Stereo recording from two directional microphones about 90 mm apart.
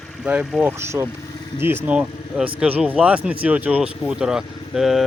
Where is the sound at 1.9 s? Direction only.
10° right (ahead or behind).